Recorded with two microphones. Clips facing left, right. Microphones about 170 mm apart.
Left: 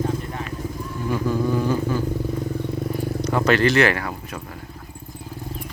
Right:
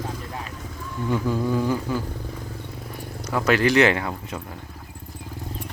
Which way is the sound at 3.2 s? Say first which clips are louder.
Left 1 dB; 5° right (ahead or behind).